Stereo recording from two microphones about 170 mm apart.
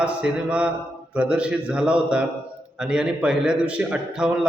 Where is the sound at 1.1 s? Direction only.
5° right (ahead or behind).